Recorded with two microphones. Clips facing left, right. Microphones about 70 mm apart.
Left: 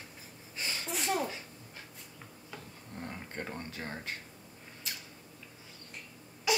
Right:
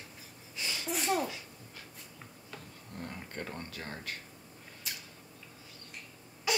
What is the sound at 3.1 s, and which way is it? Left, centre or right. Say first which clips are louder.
Speech: left 1 dB; left.